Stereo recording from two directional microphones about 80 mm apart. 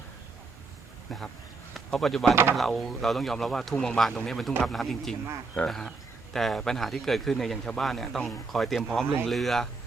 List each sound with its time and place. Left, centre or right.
1.7 s speech: centre
2.3 s speech: right
2.6 s a man's voice: centre